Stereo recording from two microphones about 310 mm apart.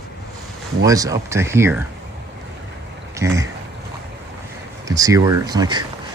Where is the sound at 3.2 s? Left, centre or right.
Centre.